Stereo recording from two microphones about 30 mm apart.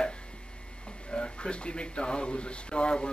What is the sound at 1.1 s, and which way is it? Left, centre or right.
Speech, left.